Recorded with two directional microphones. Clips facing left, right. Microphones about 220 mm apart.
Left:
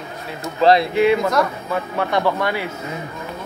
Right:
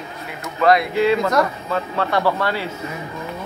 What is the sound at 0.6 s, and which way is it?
Speech, 30° left (ahead or behind).